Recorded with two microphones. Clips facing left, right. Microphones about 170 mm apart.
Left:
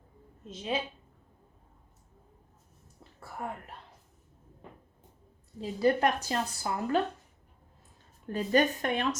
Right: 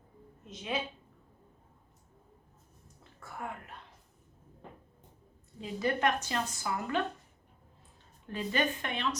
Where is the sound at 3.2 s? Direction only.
35° left (ahead or behind).